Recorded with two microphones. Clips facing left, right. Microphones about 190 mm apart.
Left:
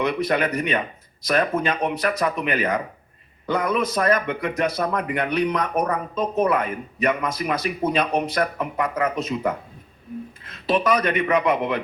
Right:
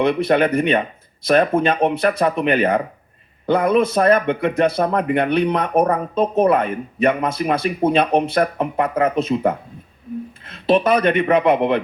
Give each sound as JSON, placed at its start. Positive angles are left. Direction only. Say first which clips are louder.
{"t": 0.0, "sound": "speech", "louder": "right 6 dB", "side_deg": -30}